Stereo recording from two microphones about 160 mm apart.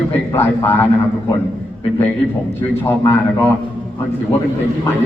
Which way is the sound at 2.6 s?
15° left (ahead or behind).